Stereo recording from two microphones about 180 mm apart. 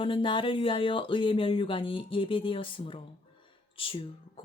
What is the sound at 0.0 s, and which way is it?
Speech, 30° left (ahead or behind).